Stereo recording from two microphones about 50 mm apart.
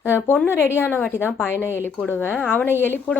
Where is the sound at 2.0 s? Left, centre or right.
Left.